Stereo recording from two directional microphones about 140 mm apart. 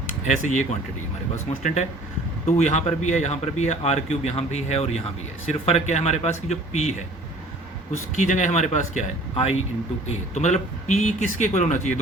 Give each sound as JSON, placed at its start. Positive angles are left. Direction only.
{"t": 0.4, "sound": "speech", "side_deg": 60}
{"t": 8.1, "sound": "speech", "side_deg": 65}
{"t": 9.3, "sound": "speech", "side_deg": 50}